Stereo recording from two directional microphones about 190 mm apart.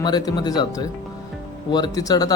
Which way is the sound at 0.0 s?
20° left (ahead or behind).